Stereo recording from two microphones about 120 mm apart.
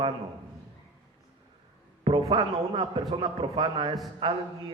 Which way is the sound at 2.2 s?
35° right (ahead or behind).